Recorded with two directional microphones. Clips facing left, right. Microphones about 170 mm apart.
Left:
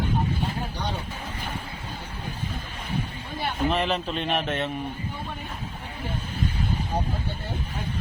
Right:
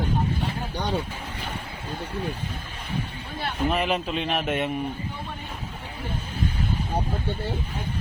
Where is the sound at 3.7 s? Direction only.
10° right (ahead or behind).